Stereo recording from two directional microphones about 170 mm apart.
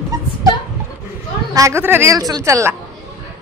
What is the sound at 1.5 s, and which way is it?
A woman's voice, 15° right (ahead or behind).